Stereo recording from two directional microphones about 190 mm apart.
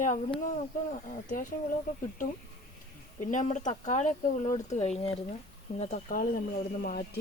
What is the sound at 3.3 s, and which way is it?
Speech, 40° left (ahead or behind).